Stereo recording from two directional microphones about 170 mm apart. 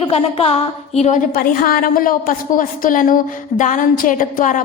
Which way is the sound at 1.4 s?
55° left (ahead or behind).